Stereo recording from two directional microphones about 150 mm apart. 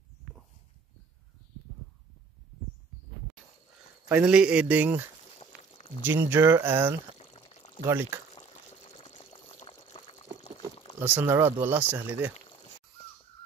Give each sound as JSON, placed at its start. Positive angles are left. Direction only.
{"t": 4.1, "sound": "speech", "side_deg": -5}
{"t": 5.4, "sound": "a sound", "side_deg": 45}
{"t": 6.0, "sound": "speech", "side_deg": -15}
{"t": 7.2, "sound": "pour", "side_deg": 45}
{"t": 7.8, "sound": "speech", "side_deg": -15}
{"t": 8.9, "sound": "boiling", "side_deg": 35}
{"t": 11.0, "sound": "speech", "side_deg": -15}